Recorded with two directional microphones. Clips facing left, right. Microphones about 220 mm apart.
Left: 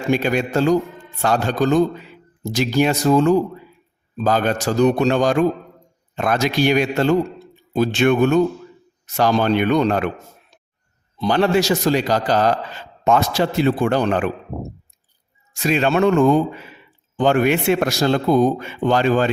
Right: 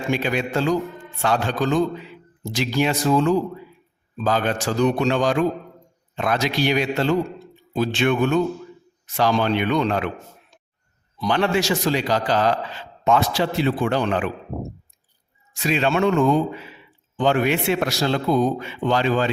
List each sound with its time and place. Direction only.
0.1 s a man's voice: 45° left (ahead or behind)
11.3 s a man's voice: 40° left (ahead or behind)
15.5 s a man's voice: 45° left (ahead or behind)